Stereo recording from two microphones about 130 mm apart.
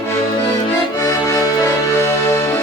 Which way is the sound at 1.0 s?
25° left (ahead or behind).